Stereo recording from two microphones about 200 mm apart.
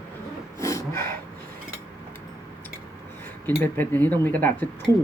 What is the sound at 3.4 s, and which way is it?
Speech, 10° left (ahead or behind).